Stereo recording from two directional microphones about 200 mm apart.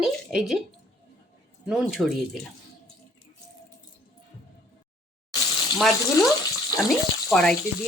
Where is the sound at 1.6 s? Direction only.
Centre (ahead or behind).